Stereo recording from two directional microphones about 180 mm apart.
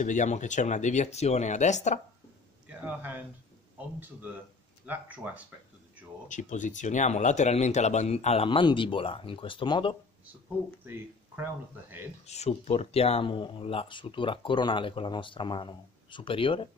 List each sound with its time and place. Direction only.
0.0 s speech: 45° left (ahead or behind)
2.7 s a man's voice: 10° right (ahead or behind)
6.2 s speech: 45° left (ahead or behind); by 9.9 s 30° left (ahead or behind)
12.3 s speech: 35° left (ahead or behind)